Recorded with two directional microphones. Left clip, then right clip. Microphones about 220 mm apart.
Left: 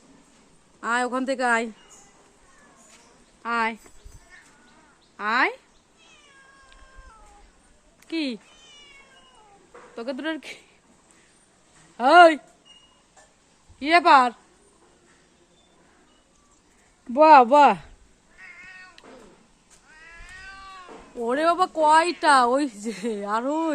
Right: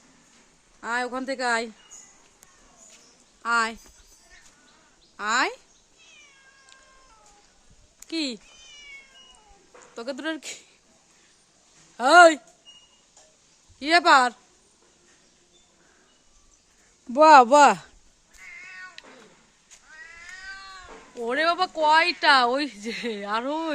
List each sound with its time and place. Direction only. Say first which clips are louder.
0.8 s speech: left 4 dB; centre (ahead or behind)
3.4 s speech: right 1 dB; 20° right (ahead or behind)
5.1 s speech: left 2 dB; 15° right (ahead or behind)
7.9 s speech: left 1 dB; 15° right (ahead or behind)
9.9 s speech: left 1 dB; 15° right (ahead or behind)
11.9 s speech: left 1 dB; 20° right (ahead or behind)
13.7 s speech: left 2 dB; 20° right (ahead or behind)
17.1 s speech: even; 20° right (ahead or behind)
20.4 s cat: right 1 dB; 20° right (ahead or behind)
21.2 s speech: left 2 dB; 5° left (ahead or behind)